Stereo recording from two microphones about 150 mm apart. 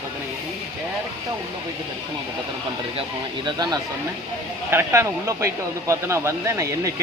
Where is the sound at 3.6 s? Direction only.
25° right (ahead or behind).